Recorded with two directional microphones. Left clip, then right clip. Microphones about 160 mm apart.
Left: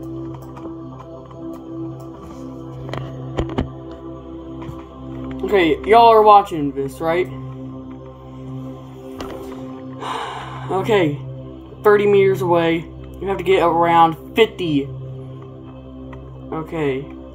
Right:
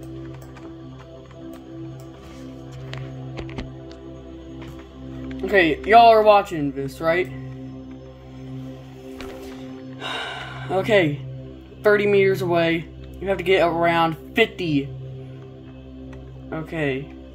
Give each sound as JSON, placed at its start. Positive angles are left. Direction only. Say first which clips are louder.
{"t": 5.4, "sound": "speech", "louder": "left 2 dB", "side_deg": -55}
{"t": 9.9, "sound": "music", "louder": "left 3 dB", "side_deg": -55}
{"t": 11.8, "sound": "speech", "louder": "left 4 dB", "side_deg": -55}
{"t": 16.4, "sound": "speech", "louder": "left 3 dB", "side_deg": -55}